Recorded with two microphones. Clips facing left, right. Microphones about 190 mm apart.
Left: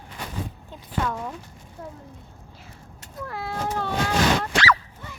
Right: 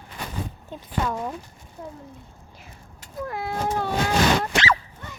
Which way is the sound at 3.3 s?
20° right (ahead or behind).